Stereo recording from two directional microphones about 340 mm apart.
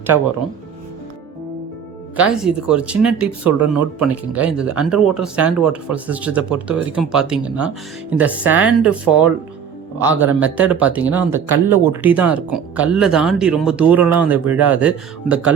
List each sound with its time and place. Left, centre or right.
2.1 s speech: centre